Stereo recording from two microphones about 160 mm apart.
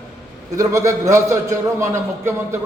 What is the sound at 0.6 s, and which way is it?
A man's voice, 20° right (ahead or behind).